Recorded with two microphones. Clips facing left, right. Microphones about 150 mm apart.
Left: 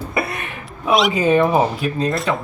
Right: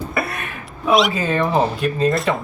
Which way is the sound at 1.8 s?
Centre (ahead or behind).